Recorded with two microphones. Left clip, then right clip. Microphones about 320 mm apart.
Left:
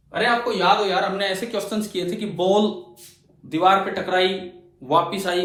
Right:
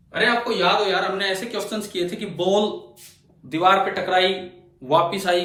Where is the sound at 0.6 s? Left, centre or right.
Centre.